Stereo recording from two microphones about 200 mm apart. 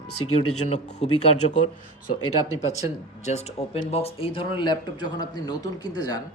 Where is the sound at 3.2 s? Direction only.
30° left (ahead or behind).